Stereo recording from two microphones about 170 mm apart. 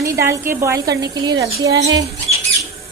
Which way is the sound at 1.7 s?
90° right.